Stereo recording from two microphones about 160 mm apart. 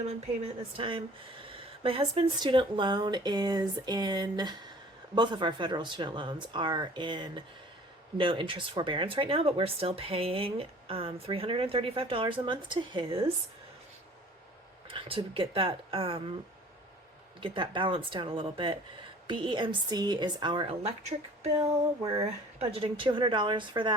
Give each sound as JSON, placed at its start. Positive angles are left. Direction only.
{"t": 0.4, "sound": "speech", "side_deg": -35}
{"t": 14.8, "sound": "speech", "side_deg": -35}
{"t": 17.4, "sound": "speech", "side_deg": -30}
{"t": 22.0, "sound": "speech", "side_deg": -35}